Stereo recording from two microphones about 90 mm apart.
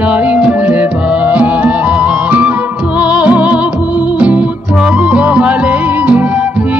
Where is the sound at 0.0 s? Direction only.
15° right (ahead or behind).